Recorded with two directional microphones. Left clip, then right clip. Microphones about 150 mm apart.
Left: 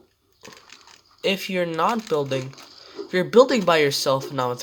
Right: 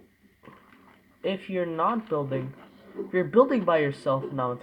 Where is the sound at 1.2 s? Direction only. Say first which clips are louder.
Left 6 dB; 45° left (ahead or behind).